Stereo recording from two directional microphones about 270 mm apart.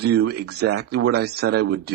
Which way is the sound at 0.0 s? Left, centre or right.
Right.